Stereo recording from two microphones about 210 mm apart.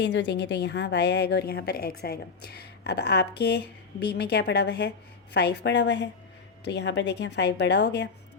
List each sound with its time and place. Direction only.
0.0 s a woman's voice: 55° left (ahead or behind)